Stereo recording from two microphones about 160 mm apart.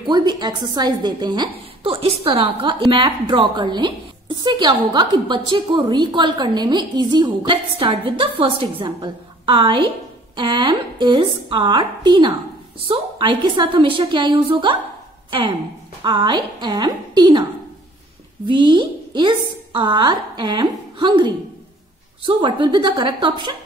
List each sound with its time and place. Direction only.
0.0 s a woman's voice: 25° right (ahead or behind)
16.0 s a woman's voice: 30° right (ahead or behind)
18.5 s a woman's voice: 30° right (ahead or behind)